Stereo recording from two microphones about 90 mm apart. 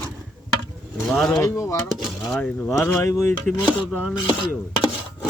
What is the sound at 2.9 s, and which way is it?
Speech, 40° left (ahead or behind).